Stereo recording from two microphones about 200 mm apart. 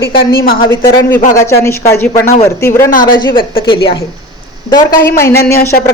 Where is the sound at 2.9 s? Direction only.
45° left (ahead or behind).